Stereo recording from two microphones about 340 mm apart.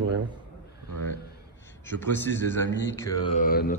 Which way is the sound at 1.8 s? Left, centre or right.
Centre.